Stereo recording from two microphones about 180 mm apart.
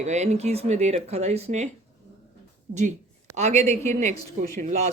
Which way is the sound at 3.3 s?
40° right (ahead or behind).